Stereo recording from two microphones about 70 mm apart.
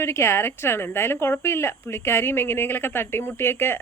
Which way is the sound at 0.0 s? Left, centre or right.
Left.